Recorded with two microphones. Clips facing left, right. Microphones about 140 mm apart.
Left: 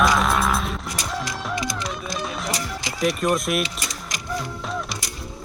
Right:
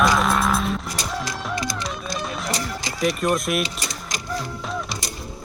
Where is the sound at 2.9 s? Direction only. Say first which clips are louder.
Even; centre (ahead or behind).